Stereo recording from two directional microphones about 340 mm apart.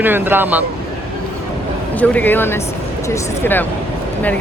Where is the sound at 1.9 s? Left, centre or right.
Centre.